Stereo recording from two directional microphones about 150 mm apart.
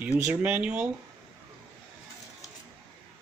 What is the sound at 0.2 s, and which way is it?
Speech, 10° right (ahead or behind).